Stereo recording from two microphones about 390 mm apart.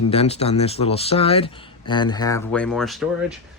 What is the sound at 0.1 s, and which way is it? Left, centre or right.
Speech, centre.